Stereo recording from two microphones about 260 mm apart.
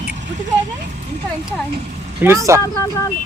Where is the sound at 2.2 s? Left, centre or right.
Centre.